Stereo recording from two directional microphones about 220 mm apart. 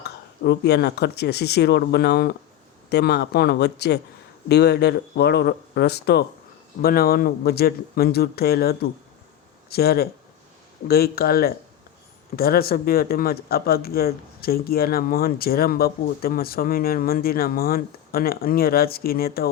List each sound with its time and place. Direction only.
0.0 s speech: 50° left (ahead or behind)